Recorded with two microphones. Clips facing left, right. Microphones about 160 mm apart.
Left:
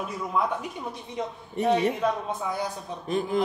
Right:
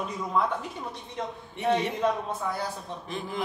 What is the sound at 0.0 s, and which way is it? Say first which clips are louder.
Speech: even; 5° left (ahead or behind).